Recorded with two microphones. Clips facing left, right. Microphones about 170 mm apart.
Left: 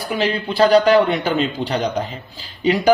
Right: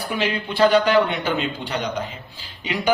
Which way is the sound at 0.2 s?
35° left (ahead or behind).